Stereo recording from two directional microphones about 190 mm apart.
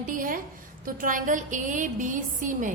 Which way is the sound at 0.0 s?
45° right (ahead or behind).